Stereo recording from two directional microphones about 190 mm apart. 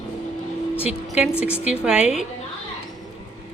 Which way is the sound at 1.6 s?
5° right (ahead or behind).